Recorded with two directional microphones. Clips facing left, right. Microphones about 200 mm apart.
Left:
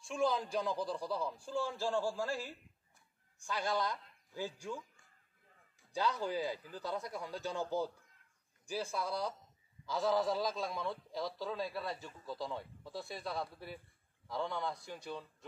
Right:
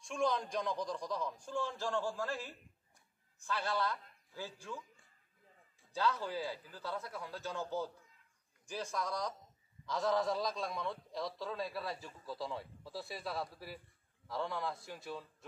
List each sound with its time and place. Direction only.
0.0 s a man's voice: 5° left (ahead or behind)
5.9 s a man's voice: 15° left (ahead or behind); by 15.2 s centre (ahead or behind)